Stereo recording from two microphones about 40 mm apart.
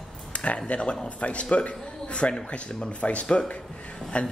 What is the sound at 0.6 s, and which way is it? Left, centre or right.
Speech, left.